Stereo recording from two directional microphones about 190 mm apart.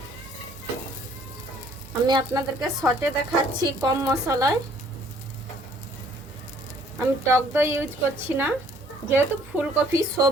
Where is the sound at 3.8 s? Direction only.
15° right (ahead or behind).